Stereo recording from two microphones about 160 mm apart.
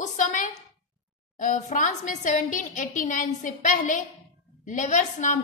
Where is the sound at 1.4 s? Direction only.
50° left (ahead or behind).